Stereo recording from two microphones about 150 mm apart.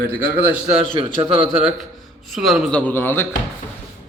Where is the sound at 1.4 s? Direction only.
Centre (ahead or behind).